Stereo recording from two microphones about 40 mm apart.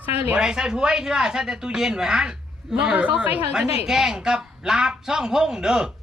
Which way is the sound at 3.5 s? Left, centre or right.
Centre.